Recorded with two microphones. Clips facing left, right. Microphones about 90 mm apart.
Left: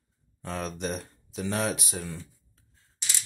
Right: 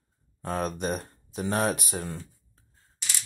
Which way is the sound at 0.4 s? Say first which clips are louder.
Right 3 dB; 45° right (ahead or behind).